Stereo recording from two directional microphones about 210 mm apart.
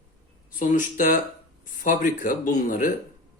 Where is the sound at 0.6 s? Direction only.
40° left (ahead or behind).